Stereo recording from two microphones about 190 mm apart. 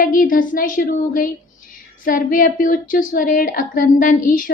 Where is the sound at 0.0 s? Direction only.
45° left (ahead or behind).